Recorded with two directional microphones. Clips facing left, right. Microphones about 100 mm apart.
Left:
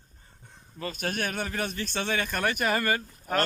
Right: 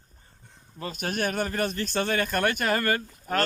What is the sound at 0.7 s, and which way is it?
Speech, 5° right (ahead or behind).